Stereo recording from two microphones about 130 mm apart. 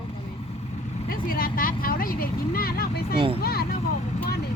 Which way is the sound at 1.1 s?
90° left.